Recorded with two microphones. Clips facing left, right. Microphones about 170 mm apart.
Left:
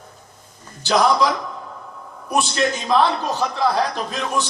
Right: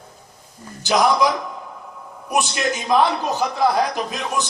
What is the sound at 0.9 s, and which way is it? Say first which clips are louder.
Speech: even; 15° right (ahead or behind).